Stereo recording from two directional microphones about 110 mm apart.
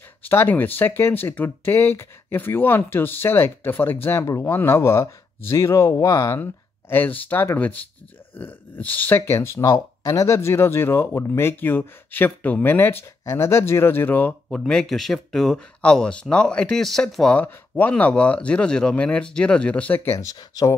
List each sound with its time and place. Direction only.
0.3 s speech: 20° left (ahead or behind)
14.7 s speech: 5° left (ahead or behind)
20.1 s speech: 30° left (ahead or behind)